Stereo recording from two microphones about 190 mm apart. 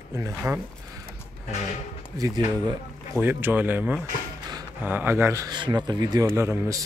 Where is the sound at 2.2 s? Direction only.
15° right (ahead or behind).